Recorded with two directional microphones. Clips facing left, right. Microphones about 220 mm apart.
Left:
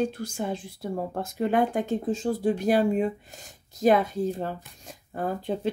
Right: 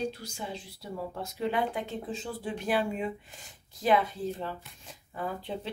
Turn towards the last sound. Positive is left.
turn(degrees=45)  # may be behind; listen again after turning